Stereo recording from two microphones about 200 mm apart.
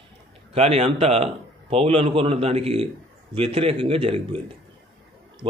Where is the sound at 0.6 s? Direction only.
30° right (ahead or behind).